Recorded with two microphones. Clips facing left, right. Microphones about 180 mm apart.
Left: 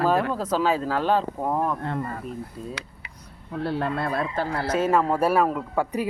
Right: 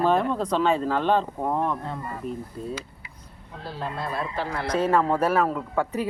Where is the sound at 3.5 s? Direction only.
65° left (ahead or behind); by 4.6 s 45° left (ahead or behind).